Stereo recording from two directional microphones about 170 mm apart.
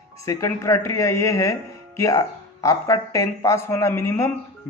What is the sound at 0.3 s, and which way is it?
A man's voice, 20° left (ahead or behind).